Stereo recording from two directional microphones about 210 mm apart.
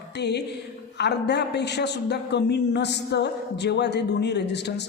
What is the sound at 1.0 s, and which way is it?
A man's voice, 55° left (ahead or behind).